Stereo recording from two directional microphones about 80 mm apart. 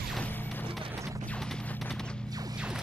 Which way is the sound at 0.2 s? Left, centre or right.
Left.